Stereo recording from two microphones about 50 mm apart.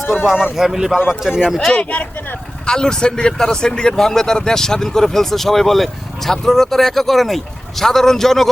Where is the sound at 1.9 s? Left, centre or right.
Left.